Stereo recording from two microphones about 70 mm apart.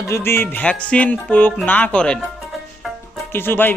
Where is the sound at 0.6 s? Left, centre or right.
Centre.